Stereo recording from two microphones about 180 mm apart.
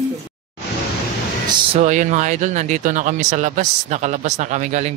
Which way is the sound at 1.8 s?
40° right (ahead or behind).